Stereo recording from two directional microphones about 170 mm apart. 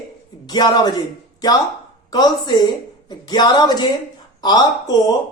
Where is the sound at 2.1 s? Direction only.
25° left (ahead or behind).